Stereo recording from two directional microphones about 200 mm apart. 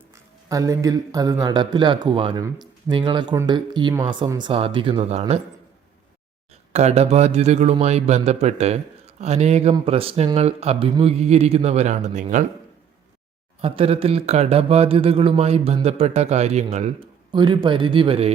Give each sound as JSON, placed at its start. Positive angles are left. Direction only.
{"t": 0.1, "sound": "speech", "side_deg": -15}
{"t": 6.5, "sound": "speech", "side_deg": -30}
{"t": 13.6, "sound": "speech", "side_deg": -30}
{"t": 17.3, "sound": "speech", "side_deg": -20}